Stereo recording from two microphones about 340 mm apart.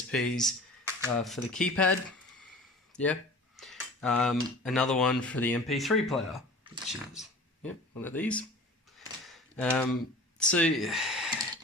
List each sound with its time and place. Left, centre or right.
0.1 s speech: centre
2.9 s speech: centre
9.0 s a sound: centre
10.3 s speech: centre